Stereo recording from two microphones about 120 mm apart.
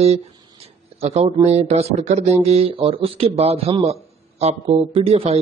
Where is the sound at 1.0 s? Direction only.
60° right (ahead or behind).